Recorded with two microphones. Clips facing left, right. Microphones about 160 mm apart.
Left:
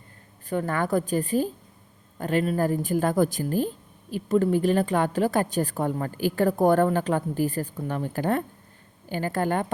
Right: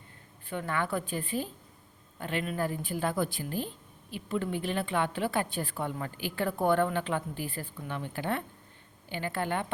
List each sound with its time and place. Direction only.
0.5 s a woman's voice: 40° left (ahead or behind)